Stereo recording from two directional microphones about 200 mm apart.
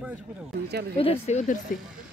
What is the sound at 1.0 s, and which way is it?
Speech, 30° left (ahead or behind).